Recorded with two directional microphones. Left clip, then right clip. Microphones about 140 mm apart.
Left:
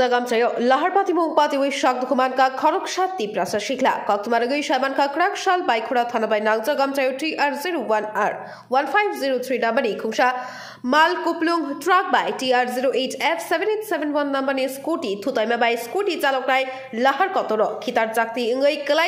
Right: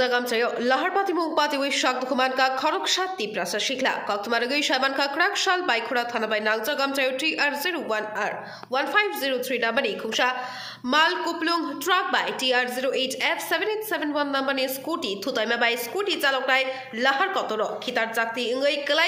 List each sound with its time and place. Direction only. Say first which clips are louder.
0.0 s a man's voice: left 4 dB; 20° left (ahead or behind)